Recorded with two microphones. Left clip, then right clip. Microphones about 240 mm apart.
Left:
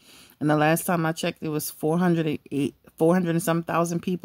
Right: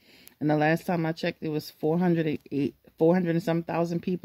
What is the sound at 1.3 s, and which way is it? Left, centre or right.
Speech, left.